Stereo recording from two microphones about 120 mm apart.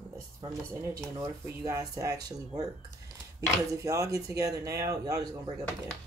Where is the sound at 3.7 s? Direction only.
25° right (ahead or behind).